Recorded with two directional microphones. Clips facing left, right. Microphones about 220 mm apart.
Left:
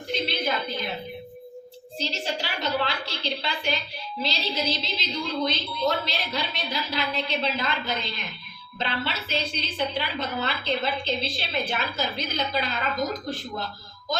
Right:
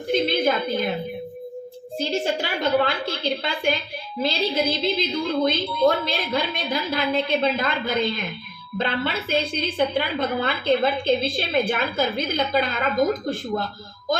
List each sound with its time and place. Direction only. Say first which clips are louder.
0.1 s a woman's voice: right 7 dB; 50° right (ahead or behind)
2.0 s a woman's voice: right 7 dB; 50° right (ahead or behind)